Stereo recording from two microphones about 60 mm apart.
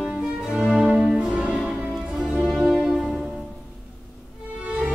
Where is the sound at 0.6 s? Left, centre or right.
Centre.